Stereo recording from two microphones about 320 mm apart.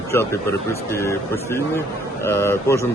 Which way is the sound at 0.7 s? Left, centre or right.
Centre.